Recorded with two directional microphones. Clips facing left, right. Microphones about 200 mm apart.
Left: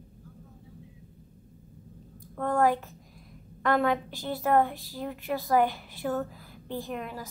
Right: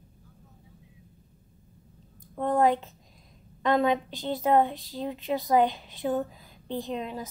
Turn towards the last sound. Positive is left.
turn(degrees=-20)  # may be behind; listen again after turning